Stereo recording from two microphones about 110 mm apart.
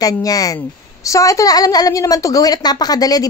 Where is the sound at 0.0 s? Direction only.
35° left (ahead or behind).